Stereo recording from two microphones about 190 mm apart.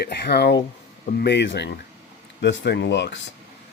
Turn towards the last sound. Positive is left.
turn(degrees=65)  # may be behind; listen again after turning